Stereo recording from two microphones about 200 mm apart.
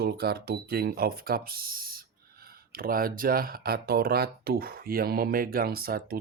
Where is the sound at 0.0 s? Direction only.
50° right (ahead or behind).